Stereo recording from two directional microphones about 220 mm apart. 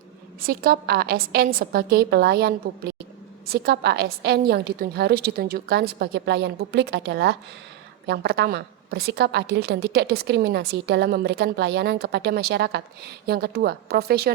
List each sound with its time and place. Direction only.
0.3 s a woman's voice: 40° right (ahead or behind)